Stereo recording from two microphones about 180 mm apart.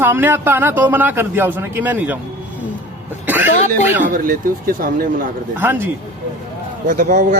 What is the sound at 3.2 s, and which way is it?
Throat clearing, 10° right (ahead or behind).